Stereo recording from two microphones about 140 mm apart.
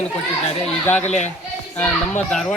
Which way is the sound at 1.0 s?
55° left (ahead or behind).